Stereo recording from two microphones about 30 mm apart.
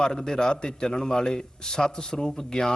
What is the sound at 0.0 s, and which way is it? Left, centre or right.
Speech, left.